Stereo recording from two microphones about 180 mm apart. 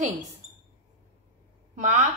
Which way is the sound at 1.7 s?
45° right (ahead or behind).